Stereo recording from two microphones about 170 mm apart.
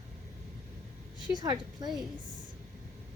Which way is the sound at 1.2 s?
25° right (ahead or behind).